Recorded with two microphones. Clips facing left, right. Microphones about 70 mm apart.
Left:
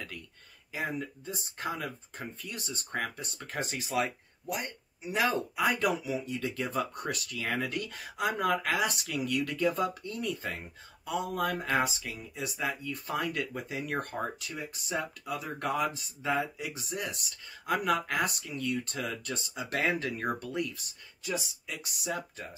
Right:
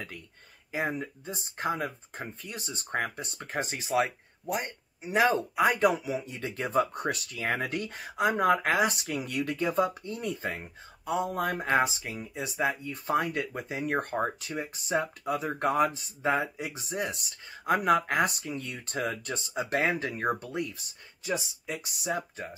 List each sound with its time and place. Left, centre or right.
0.7 s speech: right